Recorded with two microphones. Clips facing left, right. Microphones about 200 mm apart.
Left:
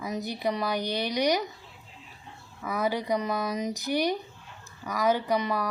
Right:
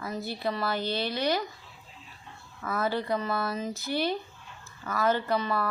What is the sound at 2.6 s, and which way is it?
Speech, 15° left (ahead or behind).